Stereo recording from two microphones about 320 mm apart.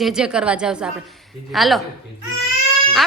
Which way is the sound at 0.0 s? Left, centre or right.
Centre.